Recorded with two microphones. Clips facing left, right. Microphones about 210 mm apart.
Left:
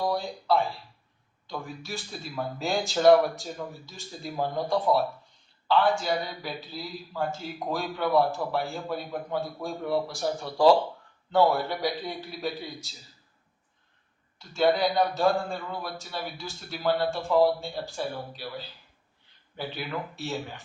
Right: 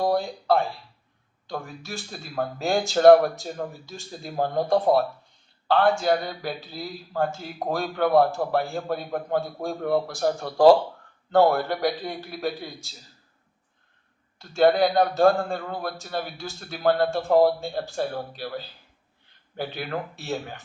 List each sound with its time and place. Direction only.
0.0 s a man's voice: 50° right (ahead or behind)
14.5 s a man's voice: 55° right (ahead or behind)